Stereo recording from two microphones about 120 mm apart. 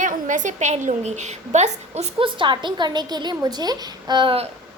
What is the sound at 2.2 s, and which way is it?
A woman's voice, 40° right (ahead or behind).